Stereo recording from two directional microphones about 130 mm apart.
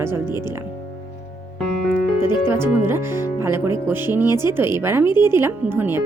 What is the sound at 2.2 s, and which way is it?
A woman's voice, 20° right (ahead or behind).